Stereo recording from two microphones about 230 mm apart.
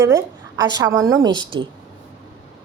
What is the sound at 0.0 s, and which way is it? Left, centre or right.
A woman's voice, centre.